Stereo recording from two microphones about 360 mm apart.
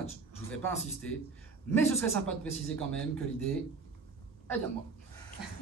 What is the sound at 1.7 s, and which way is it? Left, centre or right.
A man's voice, centre.